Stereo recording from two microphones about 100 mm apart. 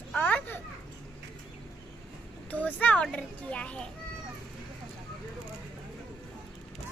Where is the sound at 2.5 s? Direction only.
15° left (ahead or behind).